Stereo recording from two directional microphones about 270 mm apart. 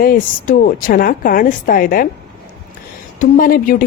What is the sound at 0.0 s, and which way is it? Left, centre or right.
A woman's voice, left.